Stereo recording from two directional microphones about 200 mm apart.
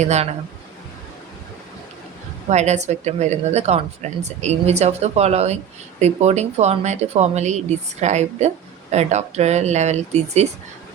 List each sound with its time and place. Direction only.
0.0 s speech: 35° right (ahead or behind)
2.5 s speech: 35° right (ahead or behind)